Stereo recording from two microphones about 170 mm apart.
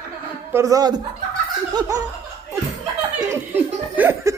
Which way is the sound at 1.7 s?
20° right (ahead or behind).